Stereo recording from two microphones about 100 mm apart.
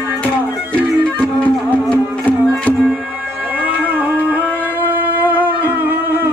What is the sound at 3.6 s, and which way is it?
Music, 15° right (ahead or behind).